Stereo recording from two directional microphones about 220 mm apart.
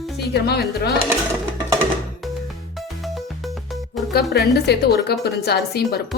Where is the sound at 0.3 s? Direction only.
45° left (ahead or behind).